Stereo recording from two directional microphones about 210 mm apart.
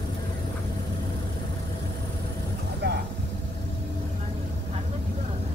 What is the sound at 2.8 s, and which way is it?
Vehicle, 55° right (ahead or behind).